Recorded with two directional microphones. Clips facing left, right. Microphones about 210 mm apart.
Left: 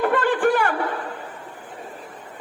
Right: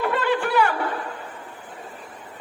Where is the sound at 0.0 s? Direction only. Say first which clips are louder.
Left 4 dB; 50° left (ahead or behind).